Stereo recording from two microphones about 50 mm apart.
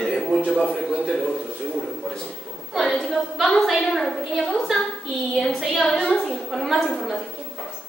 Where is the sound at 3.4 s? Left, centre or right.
Centre.